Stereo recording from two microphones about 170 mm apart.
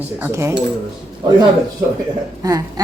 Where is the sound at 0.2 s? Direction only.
15° right (ahead or behind).